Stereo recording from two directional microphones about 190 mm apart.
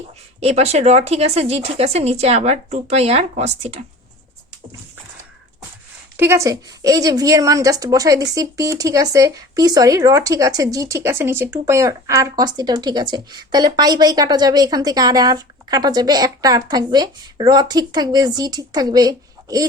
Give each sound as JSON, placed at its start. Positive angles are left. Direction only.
{"t": 0.3, "sound": "speech", "side_deg": -35}
{"t": 6.1, "sound": "a woman's voice", "side_deg": -15}